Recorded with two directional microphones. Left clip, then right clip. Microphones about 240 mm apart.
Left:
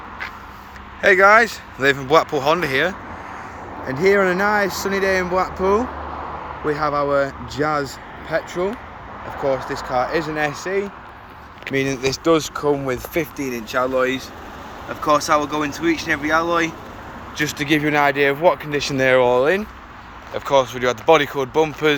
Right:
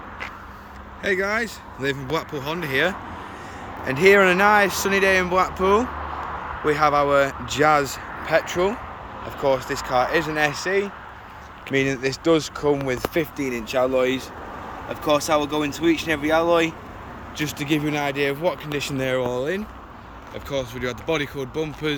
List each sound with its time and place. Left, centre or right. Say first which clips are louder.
1.0 s speech: left 11 dB; centre
6.0 s a sound: left 1 dB; left
6.7 s speech: right 1 dB; centre